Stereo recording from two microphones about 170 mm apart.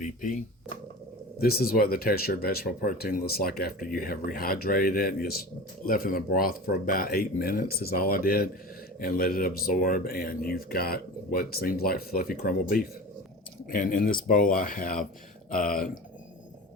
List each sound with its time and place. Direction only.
0.0 s speech: 50° left (ahead or behind)
1.4 s speech: 65° left (ahead or behind)